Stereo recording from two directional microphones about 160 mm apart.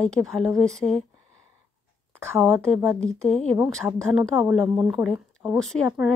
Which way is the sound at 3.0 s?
5° left (ahead or behind).